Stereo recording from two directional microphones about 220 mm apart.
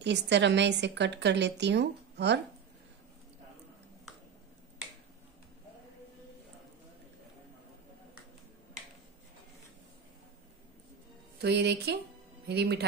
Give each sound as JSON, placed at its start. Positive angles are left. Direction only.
{"t": 0.0, "sound": "a woman's voice", "side_deg": -50}
{"t": 11.4, "sound": "a woman's voice", "side_deg": -50}